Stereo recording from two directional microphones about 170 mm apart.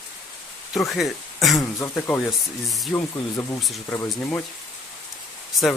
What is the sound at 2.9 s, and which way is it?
Speech, 20° left (ahead or behind).